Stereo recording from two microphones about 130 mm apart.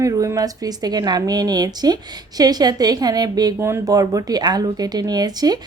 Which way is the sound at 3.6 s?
20° right (ahead or behind).